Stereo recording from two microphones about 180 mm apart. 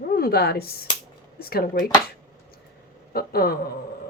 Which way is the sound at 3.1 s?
60° left (ahead or behind).